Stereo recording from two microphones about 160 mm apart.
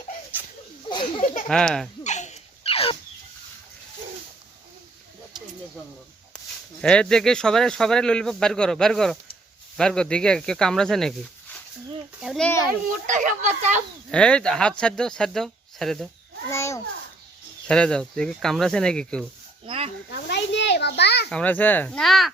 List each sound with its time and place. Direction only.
0.3 s laughter: 10° right (ahead or behind)
0.9 s a sound: 30° left (ahead or behind)
1.2 s speech: 50° left (ahead or behind)
1.5 s speech: 5° left (ahead or behind)
2.0 s a sound: 45° left (ahead or behind)
6.8 s speech: 5° left (ahead or behind)
12.2 s speech: centre (ahead or behind)
13.1 s speech: 50° right (ahead or behind)
14.1 s speech: 5° left (ahead or behind)
16.5 s speech: 15° left (ahead or behind)
17.7 s speech: 5° left (ahead or behind)
19.6 s a sound: 35° right (ahead or behind)
20.1 s a sound: 90° left
21.2 s speech: 10° left (ahead or behind)